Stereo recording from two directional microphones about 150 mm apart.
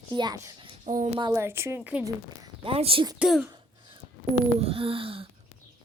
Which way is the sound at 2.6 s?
40° right (ahead or behind).